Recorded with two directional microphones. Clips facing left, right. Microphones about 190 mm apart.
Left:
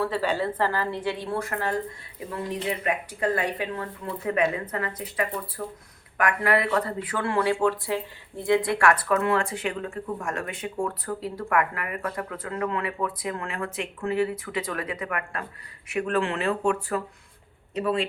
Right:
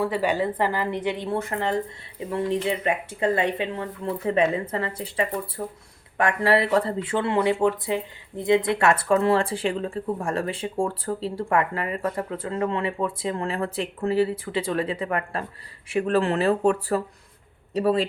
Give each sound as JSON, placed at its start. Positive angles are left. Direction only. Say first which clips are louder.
{"t": 0.0, "sound": "a woman's voice", "louder": "right 2 dB", "side_deg": -15}